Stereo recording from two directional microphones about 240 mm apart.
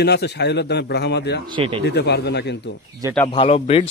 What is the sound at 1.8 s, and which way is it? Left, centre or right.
Speech, left.